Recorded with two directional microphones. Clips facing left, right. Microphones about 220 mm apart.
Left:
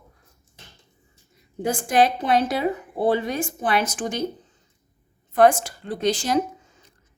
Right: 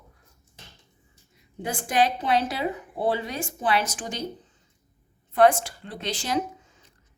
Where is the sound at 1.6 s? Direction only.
45° left (ahead or behind).